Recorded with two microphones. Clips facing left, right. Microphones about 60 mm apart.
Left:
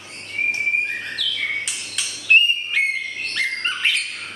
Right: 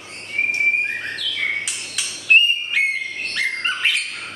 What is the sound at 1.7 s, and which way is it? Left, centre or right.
Whistle, centre.